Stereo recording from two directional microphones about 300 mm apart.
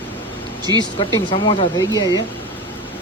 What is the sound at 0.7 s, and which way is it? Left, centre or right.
Speech, centre.